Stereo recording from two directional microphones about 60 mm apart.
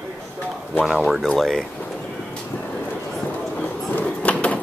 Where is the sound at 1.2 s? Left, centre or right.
Centre.